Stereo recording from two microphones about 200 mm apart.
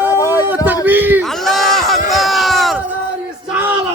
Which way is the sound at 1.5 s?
Centre (ahead or behind).